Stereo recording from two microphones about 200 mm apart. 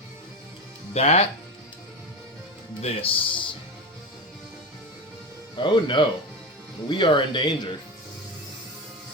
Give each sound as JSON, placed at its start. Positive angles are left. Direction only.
{"t": 0.9, "sound": "speech", "side_deg": 30}
{"t": 2.8, "sound": "speech", "side_deg": 30}
{"t": 5.5, "sound": "speech", "side_deg": 25}